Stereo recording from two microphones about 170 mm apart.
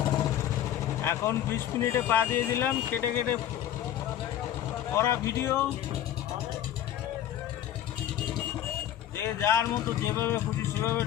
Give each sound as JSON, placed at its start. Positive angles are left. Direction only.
{"t": 1.0, "sound": "speech", "side_deg": 15}
{"t": 4.9, "sound": "speech", "side_deg": 15}
{"t": 9.1, "sound": "speech", "side_deg": 15}